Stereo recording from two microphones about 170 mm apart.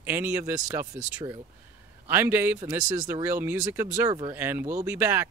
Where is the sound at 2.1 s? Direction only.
15° right (ahead or behind).